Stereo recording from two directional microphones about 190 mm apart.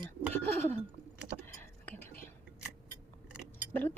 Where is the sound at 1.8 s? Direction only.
10° left (ahead or behind).